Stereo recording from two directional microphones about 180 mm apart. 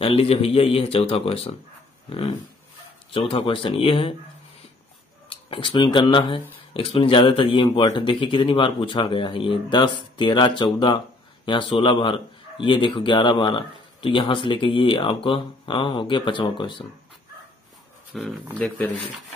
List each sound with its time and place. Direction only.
0.0 s speech: 30° left (ahead or behind)
2.0 s a sound: 30° left (ahead or behind)
3.1 s speech: 30° left (ahead or behind)
5.3 s speech: 30° left (ahead or behind)
18.1 s speech: centre (ahead or behind)